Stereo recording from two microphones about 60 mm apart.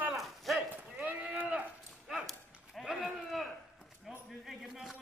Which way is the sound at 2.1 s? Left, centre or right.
Centre.